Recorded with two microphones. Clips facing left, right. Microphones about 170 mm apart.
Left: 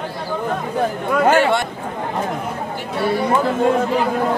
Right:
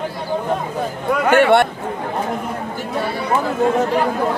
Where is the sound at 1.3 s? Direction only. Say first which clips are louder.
Right 4 dB; 60° right (ahead or behind).